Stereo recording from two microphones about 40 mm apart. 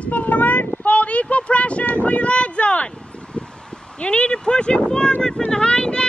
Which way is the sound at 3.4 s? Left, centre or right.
Left.